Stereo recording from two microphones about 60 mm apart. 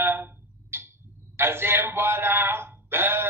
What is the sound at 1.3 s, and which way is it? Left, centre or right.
Speech, right.